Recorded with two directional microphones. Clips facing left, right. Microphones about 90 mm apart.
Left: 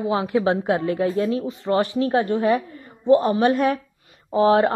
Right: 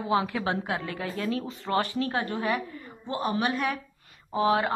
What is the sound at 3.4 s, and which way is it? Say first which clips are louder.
Speech: left 9 dB; 40° left (ahead or behind).